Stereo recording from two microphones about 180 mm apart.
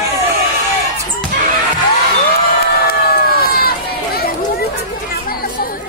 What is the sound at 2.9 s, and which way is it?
Run, 60° left (ahead or behind).